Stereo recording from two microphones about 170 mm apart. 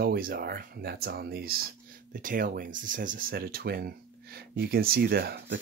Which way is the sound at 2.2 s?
55° right (ahead or behind).